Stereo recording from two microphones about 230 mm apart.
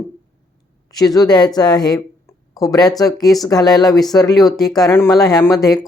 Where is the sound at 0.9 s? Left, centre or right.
Centre.